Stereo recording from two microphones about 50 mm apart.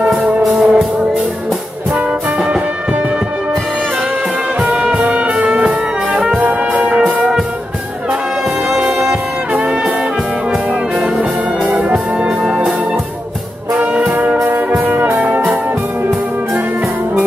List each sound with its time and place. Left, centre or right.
0.5 s music: right
2.3 s music: centre
5.0 s music: right
8.6 s music: centre
9.5 s brass instrument: right
10.5 s music: centre
11.8 s music: right
13.9 s brass instrument: right
14.8 s music: right